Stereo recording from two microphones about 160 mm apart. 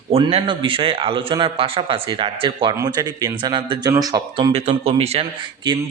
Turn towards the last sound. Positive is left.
turn(degrees=-30)  # may be behind; listen again after turning